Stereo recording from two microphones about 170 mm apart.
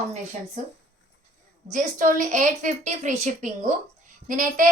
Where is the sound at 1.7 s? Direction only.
50° right (ahead or behind).